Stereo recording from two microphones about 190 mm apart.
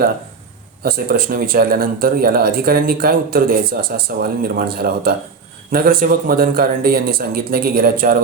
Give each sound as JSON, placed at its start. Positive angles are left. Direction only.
{"t": 0.8, "sound": "speech", "side_deg": -50}